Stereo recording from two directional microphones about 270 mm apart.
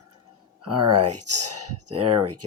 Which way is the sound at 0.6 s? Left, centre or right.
Right.